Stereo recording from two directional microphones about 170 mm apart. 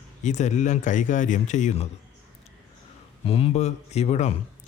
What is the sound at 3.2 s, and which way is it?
Speech, 35° left (ahead or behind).